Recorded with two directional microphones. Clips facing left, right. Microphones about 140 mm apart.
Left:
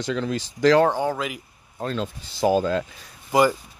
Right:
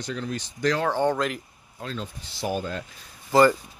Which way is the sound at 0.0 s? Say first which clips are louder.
Left 6 dB; 90° left.